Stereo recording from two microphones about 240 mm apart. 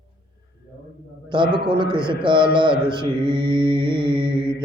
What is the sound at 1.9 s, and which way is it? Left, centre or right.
Mantra, centre.